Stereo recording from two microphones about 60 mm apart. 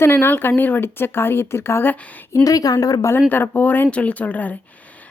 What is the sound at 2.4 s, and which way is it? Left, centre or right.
Speech, left.